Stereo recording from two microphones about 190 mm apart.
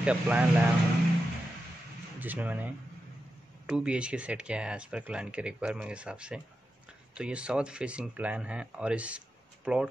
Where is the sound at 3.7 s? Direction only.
5° right (ahead or behind).